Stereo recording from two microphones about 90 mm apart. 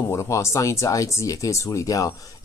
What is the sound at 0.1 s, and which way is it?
Speech, 35° left (ahead or behind).